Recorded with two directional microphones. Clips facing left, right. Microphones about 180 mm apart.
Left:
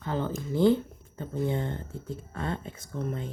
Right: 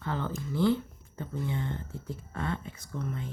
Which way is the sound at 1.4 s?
40° left (ahead or behind).